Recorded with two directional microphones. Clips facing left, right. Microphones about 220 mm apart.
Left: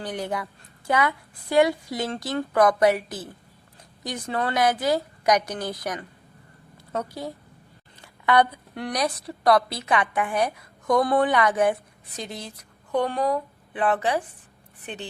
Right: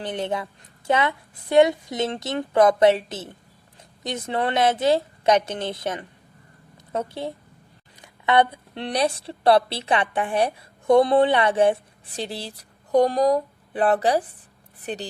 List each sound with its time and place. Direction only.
0.0 s a woman's voice: 25° right (ahead or behind)